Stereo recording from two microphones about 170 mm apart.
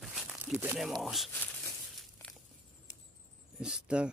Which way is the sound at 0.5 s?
10° right (ahead or behind).